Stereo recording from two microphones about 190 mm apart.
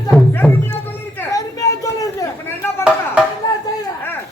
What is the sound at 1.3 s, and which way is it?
Chatter, 15° left (ahead or behind).